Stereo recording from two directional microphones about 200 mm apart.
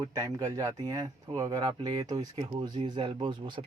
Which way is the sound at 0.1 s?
15° right (ahead or behind).